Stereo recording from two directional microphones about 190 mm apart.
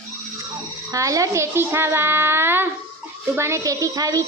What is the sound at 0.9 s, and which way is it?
A child's voice, 15° right (ahead or behind).